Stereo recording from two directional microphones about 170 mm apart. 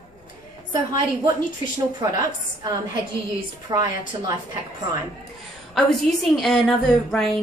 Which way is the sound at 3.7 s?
25° right (ahead or behind).